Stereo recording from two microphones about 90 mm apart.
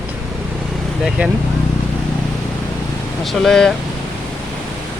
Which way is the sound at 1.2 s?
15° right (ahead or behind).